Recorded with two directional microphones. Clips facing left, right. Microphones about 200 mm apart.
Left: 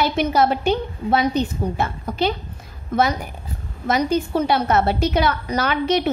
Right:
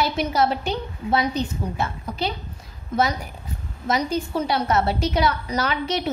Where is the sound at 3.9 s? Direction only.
60° left (ahead or behind).